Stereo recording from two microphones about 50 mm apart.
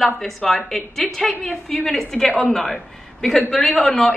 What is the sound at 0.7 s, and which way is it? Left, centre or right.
A woman's voice, centre.